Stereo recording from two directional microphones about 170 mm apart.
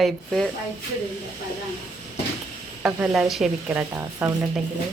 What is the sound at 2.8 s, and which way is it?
Speech, 10° right (ahead or behind).